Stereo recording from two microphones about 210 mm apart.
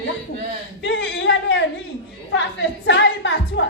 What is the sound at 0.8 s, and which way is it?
Speech, 55° left (ahead or behind).